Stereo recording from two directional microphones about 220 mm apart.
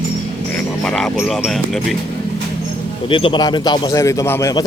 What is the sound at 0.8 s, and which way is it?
Music, 5° left (ahead or behind).